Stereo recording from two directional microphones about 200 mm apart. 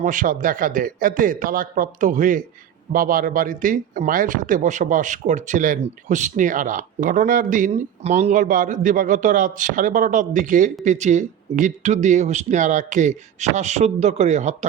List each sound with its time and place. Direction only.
0.0 s speech: 40° right (ahead or behind)